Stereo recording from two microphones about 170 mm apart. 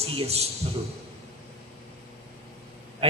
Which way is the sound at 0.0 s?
35° right (ahead or behind).